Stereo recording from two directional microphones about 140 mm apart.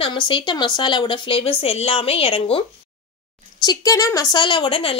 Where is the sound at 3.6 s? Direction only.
25° left (ahead or behind); by 4.9 s 40° left (ahead or behind).